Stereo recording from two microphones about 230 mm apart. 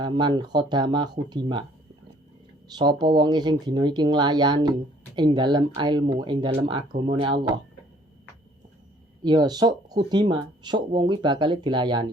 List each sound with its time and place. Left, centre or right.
0.0 s speech: right
2.7 s speech: centre
9.2 s speech: centre